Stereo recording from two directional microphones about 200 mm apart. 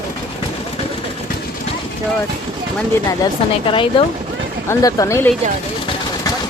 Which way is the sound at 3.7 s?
25° left (ahead or behind).